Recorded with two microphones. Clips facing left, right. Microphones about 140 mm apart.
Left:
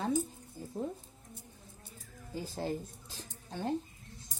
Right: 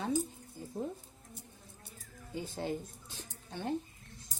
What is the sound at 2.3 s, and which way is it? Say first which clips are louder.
Speech: left 1 dB; 35° left (ahead or behind).